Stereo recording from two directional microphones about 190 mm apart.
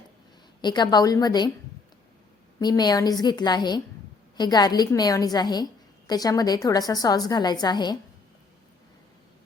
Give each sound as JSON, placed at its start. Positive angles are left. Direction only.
{"t": 0.6, "sound": "a woman's voice", "side_deg": 20}
{"t": 2.6, "sound": "a woman's voice", "side_deg": 20}